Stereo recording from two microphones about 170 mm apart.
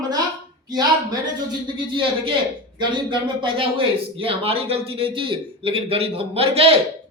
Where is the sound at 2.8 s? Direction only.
30° right (ahead or behind).